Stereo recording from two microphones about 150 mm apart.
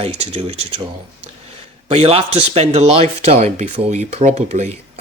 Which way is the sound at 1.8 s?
40° right (ahead or behind).